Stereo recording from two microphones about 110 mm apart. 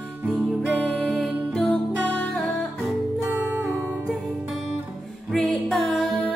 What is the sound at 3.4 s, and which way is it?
Music, 15° right (ahead or behind).